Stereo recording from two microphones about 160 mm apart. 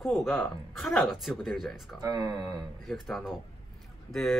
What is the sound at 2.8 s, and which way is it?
Speech, centre (ahead or behind).